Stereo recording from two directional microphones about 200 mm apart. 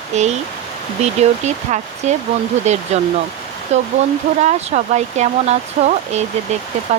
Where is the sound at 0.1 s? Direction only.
35° right (ahead or behind).